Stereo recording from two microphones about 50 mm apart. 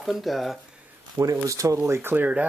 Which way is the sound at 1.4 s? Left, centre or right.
Right.